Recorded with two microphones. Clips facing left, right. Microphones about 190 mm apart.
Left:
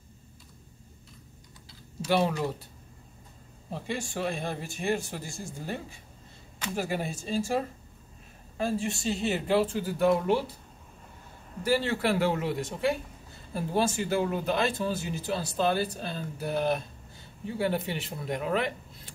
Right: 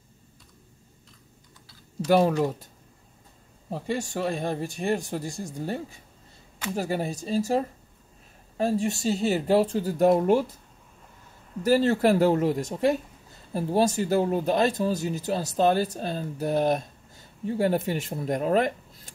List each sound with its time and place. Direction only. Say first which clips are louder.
2.0 s speech: right 6 dB; 45° right (ahead or behind)
3.7 s speech: right 4 dB; 40° right (ahead or behind)
11.6 s speech: right 6 dB; 40° right (ahead or behind)